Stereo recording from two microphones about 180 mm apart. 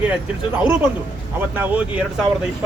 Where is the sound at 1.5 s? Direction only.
10° right (ahead or behind).